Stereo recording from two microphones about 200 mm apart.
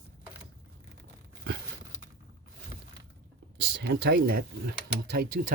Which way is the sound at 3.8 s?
55° right (ahead or behind).